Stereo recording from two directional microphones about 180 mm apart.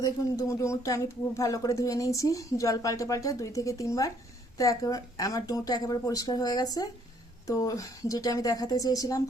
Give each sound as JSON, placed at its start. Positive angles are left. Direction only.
{"t": 0.0, "sound": "a woman's voice", "side_deg": 20}